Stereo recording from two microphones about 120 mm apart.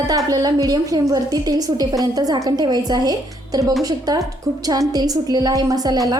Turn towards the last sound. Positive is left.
turn(degrees=-30)  # may be behind; listen again after turning